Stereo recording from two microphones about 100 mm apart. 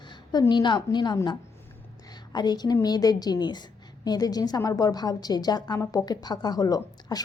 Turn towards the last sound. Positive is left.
turn(degrees=40)  # may be behind; listen again after turning